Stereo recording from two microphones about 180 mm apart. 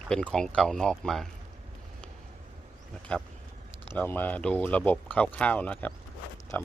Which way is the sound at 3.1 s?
5° left (ahead or behind).